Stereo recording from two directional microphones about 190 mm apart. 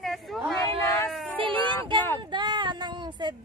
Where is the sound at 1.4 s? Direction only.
25° right (ahead or behind).